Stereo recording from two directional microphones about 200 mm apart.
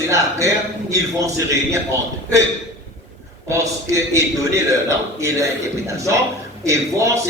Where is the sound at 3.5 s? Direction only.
15° right (ahead or behind).